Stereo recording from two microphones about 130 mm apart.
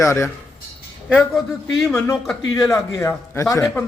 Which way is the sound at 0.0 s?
20° left (ahead or behind).